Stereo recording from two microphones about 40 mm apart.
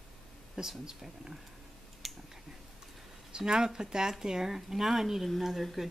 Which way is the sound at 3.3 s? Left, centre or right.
Centre.